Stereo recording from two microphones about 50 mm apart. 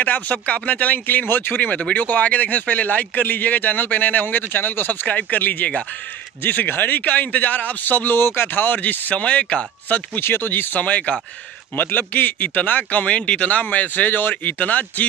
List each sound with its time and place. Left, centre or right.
0.0 s a man's voice: left
1.7 s a man's voice: left
5.0 s a man's voice: left
9.1 s speech: left
10.2 s speech: left
10.8 s speech: left
11.7 s a man's voice: left
13.0 s a man's voice: left
14.4 s a man's voice: left